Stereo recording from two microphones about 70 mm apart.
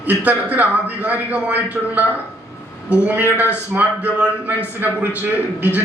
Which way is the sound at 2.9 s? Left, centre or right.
Right.